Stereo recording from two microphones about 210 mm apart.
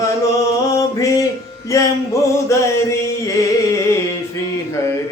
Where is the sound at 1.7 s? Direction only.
15° left (ahead or behind).